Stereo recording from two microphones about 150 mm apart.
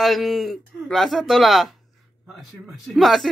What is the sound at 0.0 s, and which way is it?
A man's voice, centre (ahead or behind).